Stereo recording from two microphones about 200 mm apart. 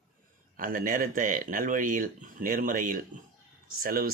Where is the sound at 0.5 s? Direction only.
45° right (ahead or behind).